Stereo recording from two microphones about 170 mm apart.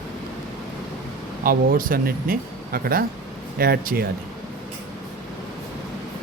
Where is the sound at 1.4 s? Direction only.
60° right (ahead or behind).